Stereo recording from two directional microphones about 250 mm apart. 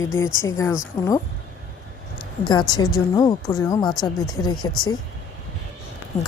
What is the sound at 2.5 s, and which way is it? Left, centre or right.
Speech, centre.